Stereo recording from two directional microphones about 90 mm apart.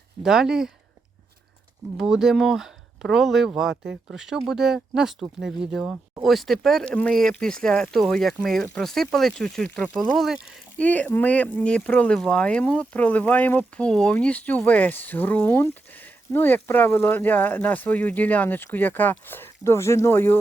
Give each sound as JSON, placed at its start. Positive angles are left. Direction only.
{"t": 0.2, "sound": "speech", "side_deg": -5}
{"t": 2.0, "sound": "speech", "side_deg": -5}
{"t": 10.8, "sound": "speech", "side_deg": 15}